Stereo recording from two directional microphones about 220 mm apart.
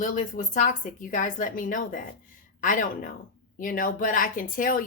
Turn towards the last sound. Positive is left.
turn(degrees=40)  # may be behind; listen again after turning